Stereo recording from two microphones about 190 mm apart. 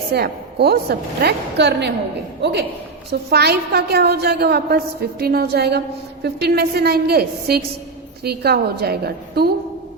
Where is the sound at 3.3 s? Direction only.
60° right (ahead or behind).